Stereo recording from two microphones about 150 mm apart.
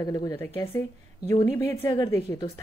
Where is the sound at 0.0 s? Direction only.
25° left (ahead or behind).